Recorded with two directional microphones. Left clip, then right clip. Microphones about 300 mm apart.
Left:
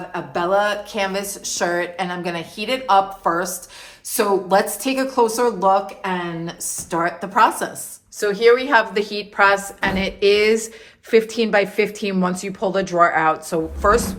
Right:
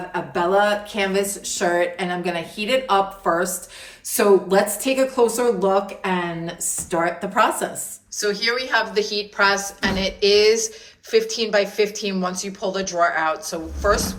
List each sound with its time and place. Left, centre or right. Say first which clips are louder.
0.1 s a woman's voice: even; centre